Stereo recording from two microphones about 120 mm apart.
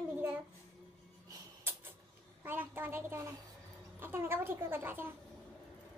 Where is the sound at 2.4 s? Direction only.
20° right (ahead or behind).